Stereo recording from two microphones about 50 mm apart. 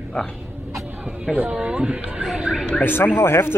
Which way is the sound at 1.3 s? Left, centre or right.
Centre.